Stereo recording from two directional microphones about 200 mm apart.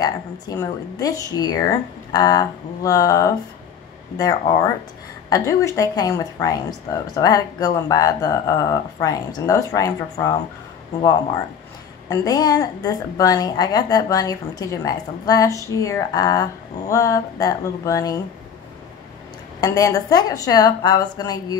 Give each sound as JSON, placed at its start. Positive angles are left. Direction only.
{"t": 0.0, "sound": "a woman's voice", "side_deg": 20}
{"t": 5.3, "sound": "a woman's voice", "side_deg": 15}
{"t": 12.1, "sound": "a woman's voice", "side_deg": 20}
{"t": 19.6, "sound": "speech", "side_deg": 15}